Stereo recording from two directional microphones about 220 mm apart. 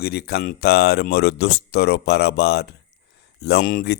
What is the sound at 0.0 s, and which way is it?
Speech, 45° left (ahead or behind).